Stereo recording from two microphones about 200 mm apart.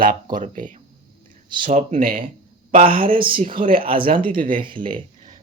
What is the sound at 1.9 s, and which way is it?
Speech, 45° right (ahead or behind).